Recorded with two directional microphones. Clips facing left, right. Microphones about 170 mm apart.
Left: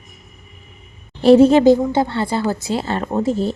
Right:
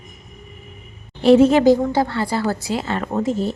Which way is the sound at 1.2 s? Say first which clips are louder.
Left 2 dB; 35° left (ahead or behind).